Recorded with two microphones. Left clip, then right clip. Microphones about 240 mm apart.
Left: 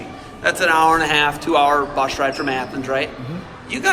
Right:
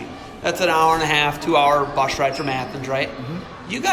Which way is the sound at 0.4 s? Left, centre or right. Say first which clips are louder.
Left 2 dB; centre.